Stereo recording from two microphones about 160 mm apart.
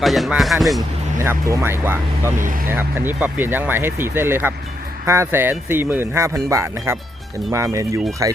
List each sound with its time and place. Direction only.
0.0 s speech: centre (ahead or behind)
1.2 s speech: 15° right (ahead or behind)